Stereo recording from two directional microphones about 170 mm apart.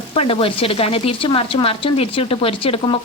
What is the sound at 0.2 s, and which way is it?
Frying, 35° left (ahead or behind).